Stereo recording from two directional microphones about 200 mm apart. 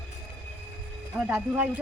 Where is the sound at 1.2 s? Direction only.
10° right (ahead or behind).